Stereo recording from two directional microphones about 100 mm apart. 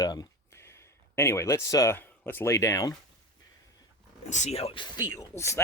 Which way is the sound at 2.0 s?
20° left (ahead or behind).